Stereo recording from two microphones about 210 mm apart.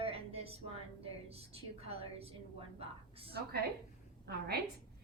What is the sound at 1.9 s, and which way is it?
Speech, 30° right (ahead or behind).